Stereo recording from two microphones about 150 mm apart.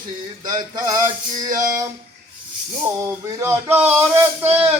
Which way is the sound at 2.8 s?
20° right (ahead or behind).